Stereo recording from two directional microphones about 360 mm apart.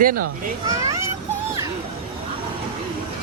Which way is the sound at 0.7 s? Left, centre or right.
Centre.